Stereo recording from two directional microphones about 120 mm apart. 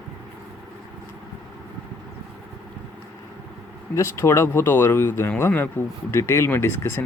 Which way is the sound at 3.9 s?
25° left (ahead or behind).